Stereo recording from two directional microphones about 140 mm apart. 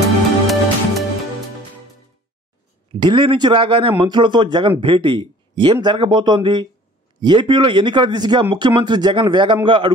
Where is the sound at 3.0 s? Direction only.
35° right (ahead or behind).